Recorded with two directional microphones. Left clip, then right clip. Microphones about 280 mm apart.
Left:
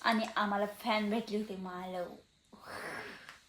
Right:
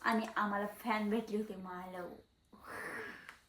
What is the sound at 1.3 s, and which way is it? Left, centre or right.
Speech, left.